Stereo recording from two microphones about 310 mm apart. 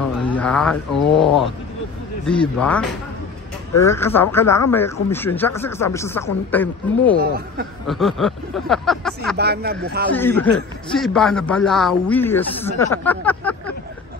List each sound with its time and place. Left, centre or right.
0.3 s a man's voice: centre
9.4 s speech: right
10.1 s a man's voice: centre